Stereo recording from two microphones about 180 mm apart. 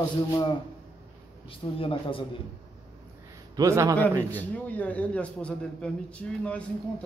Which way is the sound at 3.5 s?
20° right (ahead or behind).